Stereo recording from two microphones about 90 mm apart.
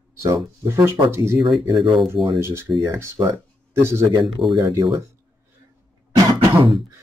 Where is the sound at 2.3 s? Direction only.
30° right (ahead or behind).